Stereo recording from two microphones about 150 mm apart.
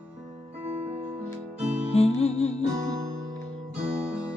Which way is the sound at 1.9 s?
45° left (ahead or behind).